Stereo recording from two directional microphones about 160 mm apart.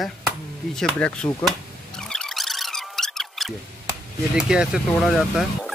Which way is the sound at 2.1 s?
Centre (ahead or behind).